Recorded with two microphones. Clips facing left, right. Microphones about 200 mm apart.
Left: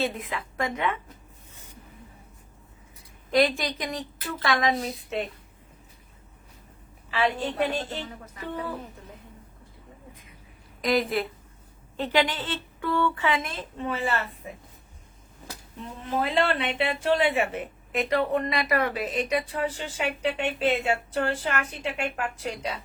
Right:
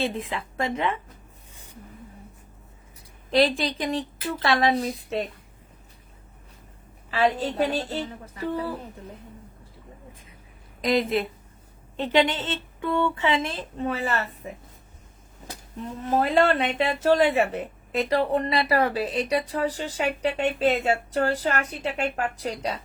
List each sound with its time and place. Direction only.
0.0 s a woman's voice: 30° right (ahead or behind)
3.3 s a woman's voice: 30° right (ahead or behind)
7.1 s a woman's voice: 40° right (ahead or behind)
10.8 s a woman's voice: 20° right (ahead or behind)
13.8 s a woman's voice: 40° right (ahead or behind)
16.0 s a woman's voice: 40° right (ahead or behind)